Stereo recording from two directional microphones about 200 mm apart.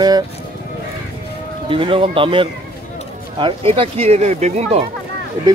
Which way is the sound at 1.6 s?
25° right (ahead or behind).